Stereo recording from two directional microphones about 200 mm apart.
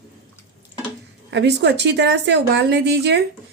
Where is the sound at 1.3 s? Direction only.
60° right (ahead or behind).